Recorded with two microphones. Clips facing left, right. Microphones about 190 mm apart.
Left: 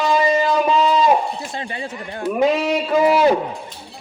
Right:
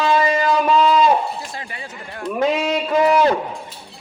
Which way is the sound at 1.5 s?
25° left (ahead or behind).